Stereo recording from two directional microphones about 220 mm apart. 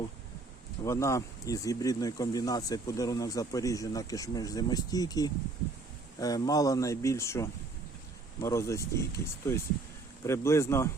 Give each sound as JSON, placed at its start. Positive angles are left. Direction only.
{"t": 0.9, "sound": "speech", "side_deg": 15}